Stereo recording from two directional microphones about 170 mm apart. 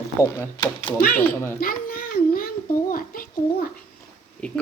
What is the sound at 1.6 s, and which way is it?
A child's voice, 60° left (ahead or behind).